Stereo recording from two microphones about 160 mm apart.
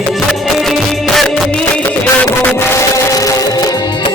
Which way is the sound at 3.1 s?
25° left (ahead or behind).